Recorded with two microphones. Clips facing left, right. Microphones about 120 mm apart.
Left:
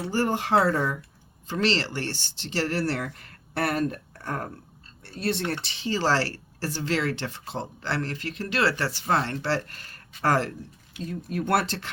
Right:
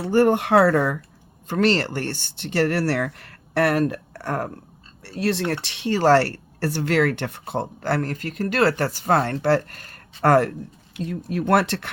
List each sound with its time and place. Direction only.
0.0 s speech: 60° right (ahead or behind)
1.5 s speech: 50° right (ahead or behind); by 4.4 s 75° right (ahead or behind)
5.1 s speech: 85° right; by 10.5 s 55° right (ahead or behind)
11.1 s speech: 90° right; by 11.9 s 70° right (ahead or behind)